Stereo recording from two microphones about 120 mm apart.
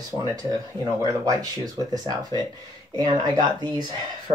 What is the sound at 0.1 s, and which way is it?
Speech, 30° right (ahead or behind).